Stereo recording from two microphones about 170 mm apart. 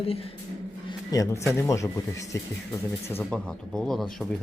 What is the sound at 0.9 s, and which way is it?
Speech, 20° left (ahead or behind).